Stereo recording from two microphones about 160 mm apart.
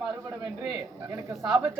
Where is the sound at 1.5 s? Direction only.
20° right (ahead or behind).